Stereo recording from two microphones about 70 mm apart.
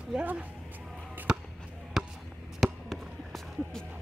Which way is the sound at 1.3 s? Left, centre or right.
Centre.